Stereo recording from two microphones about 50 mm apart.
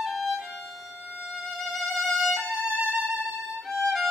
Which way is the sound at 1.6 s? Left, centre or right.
Centre.